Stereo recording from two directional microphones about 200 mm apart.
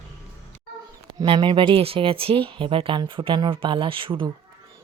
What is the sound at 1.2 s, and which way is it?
Speech, 20° right (ahead or behind).